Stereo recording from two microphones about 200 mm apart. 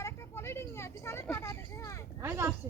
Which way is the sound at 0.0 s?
15° left (ahead or behind).